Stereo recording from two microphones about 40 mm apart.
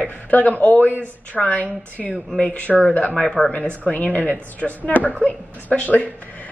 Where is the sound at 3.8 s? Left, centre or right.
Left.